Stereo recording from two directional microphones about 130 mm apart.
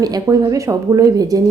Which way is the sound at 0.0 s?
30° right (ahead or behind).